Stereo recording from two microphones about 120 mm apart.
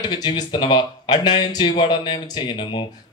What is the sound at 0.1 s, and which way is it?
Speech, 35° left (ahead or behind).